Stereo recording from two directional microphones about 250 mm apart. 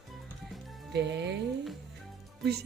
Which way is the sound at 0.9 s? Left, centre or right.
Right.